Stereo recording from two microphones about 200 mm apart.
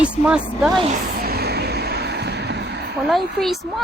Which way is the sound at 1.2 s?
50° right (ahead or behind).